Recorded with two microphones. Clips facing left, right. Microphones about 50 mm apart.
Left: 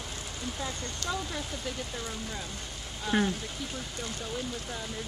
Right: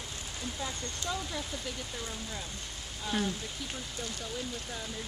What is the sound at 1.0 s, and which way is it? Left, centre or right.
Speech, centre.